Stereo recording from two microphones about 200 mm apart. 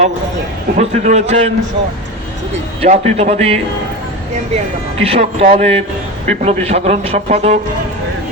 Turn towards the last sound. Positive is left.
turn(degrees=-35)  # may be behind; listen again after turning